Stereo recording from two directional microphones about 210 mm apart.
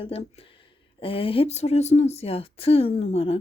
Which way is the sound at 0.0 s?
25° left (ahead or behind).